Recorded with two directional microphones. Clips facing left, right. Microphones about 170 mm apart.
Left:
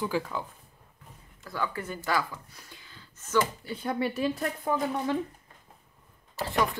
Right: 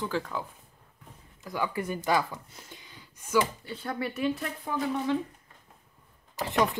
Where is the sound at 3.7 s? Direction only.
20° left (ahead or behind).